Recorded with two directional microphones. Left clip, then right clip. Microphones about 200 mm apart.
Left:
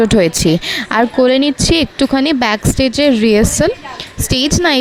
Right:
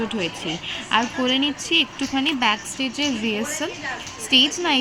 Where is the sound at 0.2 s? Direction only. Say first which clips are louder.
Left 14 dB; 55° left (ahead or behind).